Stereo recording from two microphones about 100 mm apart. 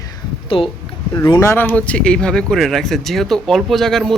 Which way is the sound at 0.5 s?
65° left (ahead or behind).